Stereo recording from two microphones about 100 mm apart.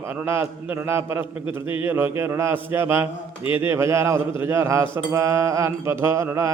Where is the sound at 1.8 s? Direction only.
25° right (ahead or behind).